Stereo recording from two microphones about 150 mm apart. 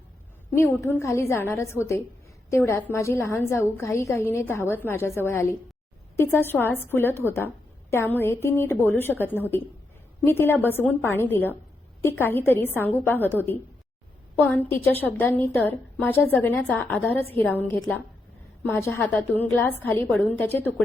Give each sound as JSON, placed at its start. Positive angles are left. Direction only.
{"t": 0.5, "sound": "a woman's voice", "side_deg": 15}